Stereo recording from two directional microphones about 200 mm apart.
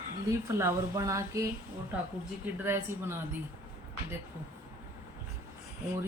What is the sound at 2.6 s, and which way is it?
Speech, 10° right (ahead or behind).